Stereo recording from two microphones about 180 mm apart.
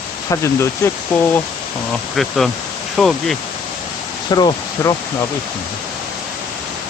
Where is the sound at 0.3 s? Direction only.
15° left (ahead or behind).